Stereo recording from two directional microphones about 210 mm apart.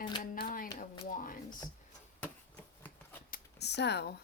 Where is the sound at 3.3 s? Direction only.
50° left (ahead or behind).